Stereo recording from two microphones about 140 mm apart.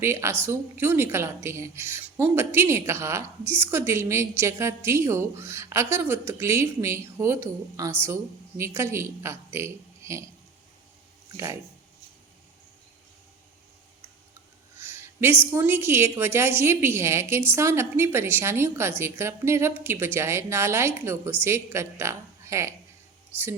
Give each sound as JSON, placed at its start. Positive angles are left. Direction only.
{"t": 0.0, "sound": "a woman's voice", "side_deg": -20}
{"t": 14.8, "sound": "a woman's voice", "side_deg": -15}